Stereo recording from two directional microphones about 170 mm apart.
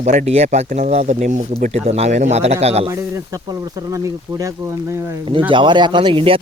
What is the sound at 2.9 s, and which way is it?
Speech, 20° right (ahead or behind).